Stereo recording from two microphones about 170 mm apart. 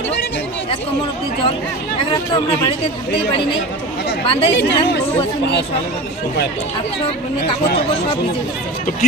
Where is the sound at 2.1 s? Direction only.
25° left (ahead or behind).